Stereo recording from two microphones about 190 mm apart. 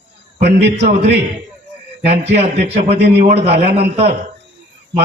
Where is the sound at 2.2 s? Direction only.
35° right (ahead or behind).